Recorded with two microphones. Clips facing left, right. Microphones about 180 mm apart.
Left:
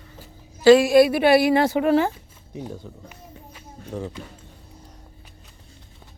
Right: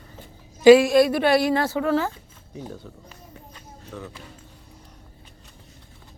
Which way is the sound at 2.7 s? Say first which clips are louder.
Left 2 dB; 10° left (ahead or behind).